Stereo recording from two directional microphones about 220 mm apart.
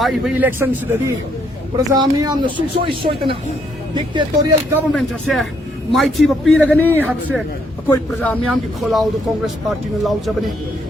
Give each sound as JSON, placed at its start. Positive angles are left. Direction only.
{"t": 0.0, "sound": "a man's voice", "side_deg": 0}
{"t": 4.9, "sound": "a man's voice", "side_deg": 0}